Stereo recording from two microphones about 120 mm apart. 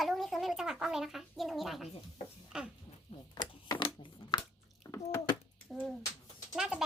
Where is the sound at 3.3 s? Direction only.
40° left (ahead or behind).